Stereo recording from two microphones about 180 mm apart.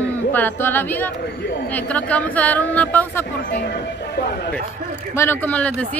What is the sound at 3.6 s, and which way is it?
Speech, 70° left (ahead or behind).